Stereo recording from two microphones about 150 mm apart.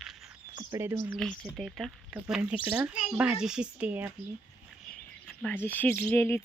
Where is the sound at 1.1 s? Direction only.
5° left (ahead or behind).